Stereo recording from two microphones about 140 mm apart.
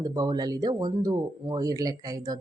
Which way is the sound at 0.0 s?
30° right (ahead or behind).